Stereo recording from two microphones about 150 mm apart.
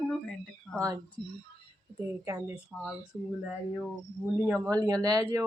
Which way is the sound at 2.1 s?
20° right (ahead or behind).